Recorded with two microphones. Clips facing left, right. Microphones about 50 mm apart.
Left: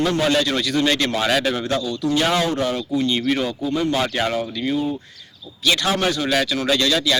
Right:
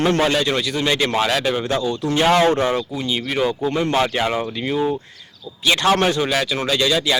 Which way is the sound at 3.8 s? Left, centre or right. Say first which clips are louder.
Right 2 dB; right.